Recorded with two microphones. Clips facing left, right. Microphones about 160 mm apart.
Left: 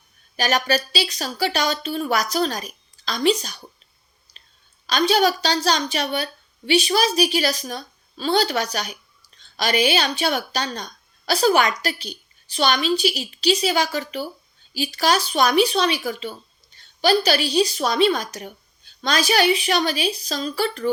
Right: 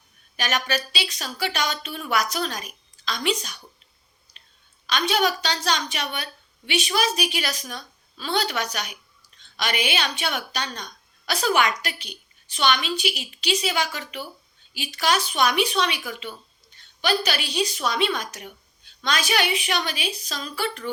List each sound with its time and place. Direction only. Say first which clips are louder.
0.3 s a woman's voice: left 5 dB; 35° left (ahead or behind)
4.3 s a sound: left 2 dB; 30° left (ahead or behind)
4.9 s a woman's voice: left 5 dB; 35° left (ahead or behind)